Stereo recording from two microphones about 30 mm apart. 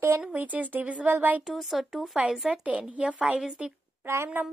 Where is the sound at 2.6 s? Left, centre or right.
Right.